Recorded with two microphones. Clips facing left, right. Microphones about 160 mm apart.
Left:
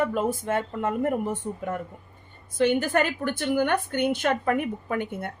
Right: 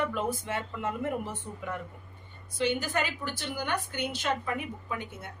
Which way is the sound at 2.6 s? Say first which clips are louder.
Left 7 dB; 55° left (ahead or behind).